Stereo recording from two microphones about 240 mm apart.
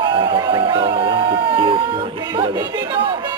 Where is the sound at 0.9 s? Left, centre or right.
Right.